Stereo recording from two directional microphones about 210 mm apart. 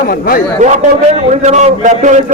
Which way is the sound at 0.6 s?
35° right (ahead or behind).